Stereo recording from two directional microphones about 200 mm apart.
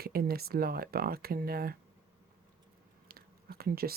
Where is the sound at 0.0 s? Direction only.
50° right (ahead or behind).